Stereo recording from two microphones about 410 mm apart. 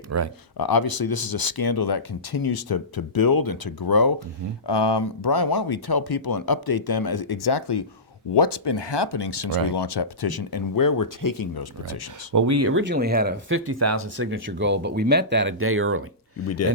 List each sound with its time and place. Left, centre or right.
0.1 s speech: right
0.5 s speech: left
4.6 s speech: left
8.4 s speech: left
12.3 s speech: right
14.3 s speech: right
16.5 s speech: left